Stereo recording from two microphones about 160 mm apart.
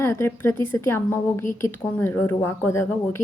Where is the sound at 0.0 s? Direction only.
15° left (ahead or behind).